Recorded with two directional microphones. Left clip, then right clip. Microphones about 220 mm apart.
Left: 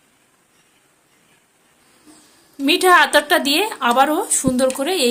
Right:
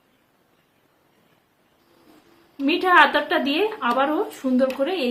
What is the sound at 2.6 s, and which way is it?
A woman's voice, 55° left (ahead or behind).